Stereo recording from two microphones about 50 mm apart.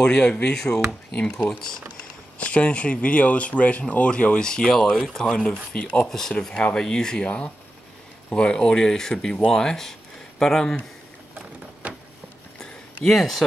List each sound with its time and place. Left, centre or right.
0.0 s speech: centre
1.9 s speech: left; by 5.3 s centre
5.3 s speech: left
6.0 s speech: centre
7.2 s speech: left; by 10.8 s centre
11.8 s a sound: right
12.5 s a sound: centre